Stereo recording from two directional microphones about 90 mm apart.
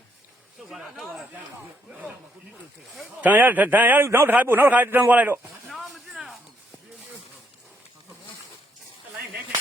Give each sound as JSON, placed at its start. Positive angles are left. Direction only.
{"t": 0.7, "sound": "speech", "side_deg": -5}
{"t": 1.9, "sound": "speech", "side_deg": -15}
{"t": 3.2, "sound": "a man's voice", "side_deg": -20}
{"t": 5.4, "sound": "a sound", "side_deg": 0}